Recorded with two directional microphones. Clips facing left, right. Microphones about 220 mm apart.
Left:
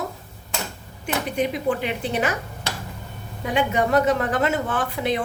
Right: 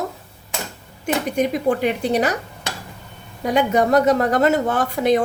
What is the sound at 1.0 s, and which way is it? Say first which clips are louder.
A woman's voice: right 4 dB; 45° right (ahead or behind).